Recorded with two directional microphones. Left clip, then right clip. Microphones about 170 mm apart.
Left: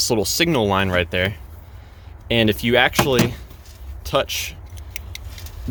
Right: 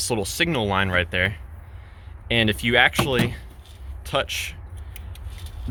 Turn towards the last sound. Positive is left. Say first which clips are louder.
# left 4 dB
turn(degrees=25)  # may be behind; listen again after turning